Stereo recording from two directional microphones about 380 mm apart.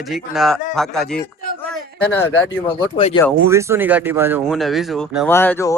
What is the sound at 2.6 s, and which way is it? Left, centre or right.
Speech, centre.